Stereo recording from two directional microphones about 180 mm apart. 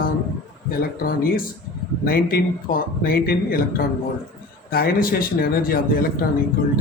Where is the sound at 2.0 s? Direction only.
55° left (ahead or behind).